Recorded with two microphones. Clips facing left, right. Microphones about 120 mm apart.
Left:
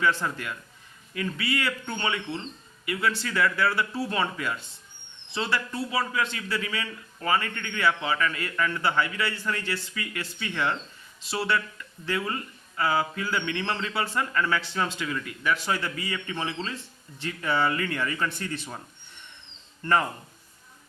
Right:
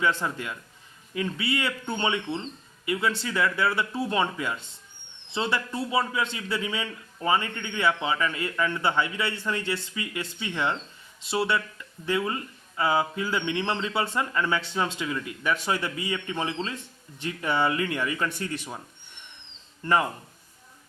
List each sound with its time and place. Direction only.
0.0 s a man's voice: 20° right (ahead or behind)
19.8 s speech: 15° right (ahead or behind)